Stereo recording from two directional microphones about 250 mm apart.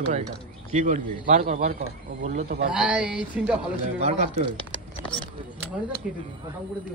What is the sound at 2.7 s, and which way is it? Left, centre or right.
Speech, centre.